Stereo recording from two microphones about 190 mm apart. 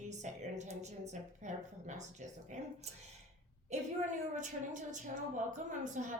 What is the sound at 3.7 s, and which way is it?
A woman's voice, 35° right (ahead or behind).